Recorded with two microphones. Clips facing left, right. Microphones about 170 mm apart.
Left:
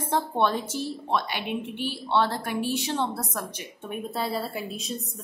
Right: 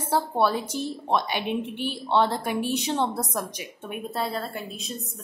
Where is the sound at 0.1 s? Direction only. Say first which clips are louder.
Right 2 dB; 5° right (ahead or behind).